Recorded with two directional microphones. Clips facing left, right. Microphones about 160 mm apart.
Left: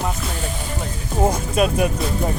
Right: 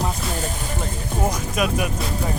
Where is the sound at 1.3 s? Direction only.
30° left (ahead or behind).